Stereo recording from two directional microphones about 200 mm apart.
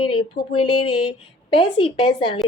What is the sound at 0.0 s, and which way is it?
A woman's voice, 25° left (ahead or behind).